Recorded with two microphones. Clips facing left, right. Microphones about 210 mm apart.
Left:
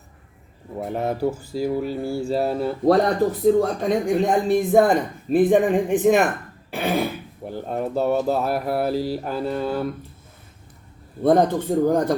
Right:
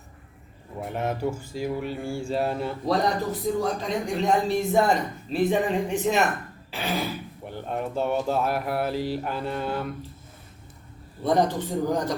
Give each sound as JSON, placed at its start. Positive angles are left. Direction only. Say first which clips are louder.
{"t": 0.9, "sound": "speech", "louder": "left 4 dB", "side_deg": 35}
{"t": 3.6, "sound": "speech", "louder": "left 6 dB", "side_deg": 55}
{"t": 6.7, "sound": "throat clearing", "louder": "left 6 dB", "side_deg": 55}
{"t": 7.4, "sound": "speech", "louder": "left 5 dB", "side_deg": 40}
{"t": 11.2, "sound": "speech", "louder": "left 5 dB", "side_deg": 55}